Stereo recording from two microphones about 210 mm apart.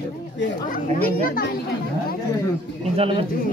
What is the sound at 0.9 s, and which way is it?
Speech, 45° left (ahead or behind).